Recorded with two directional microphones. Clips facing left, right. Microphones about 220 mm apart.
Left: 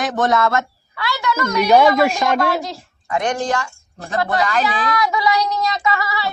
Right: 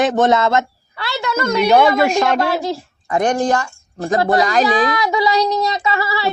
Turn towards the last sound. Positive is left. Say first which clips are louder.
# right 2 dB
turn(degrees=-30)  # may be behind; listen again after turning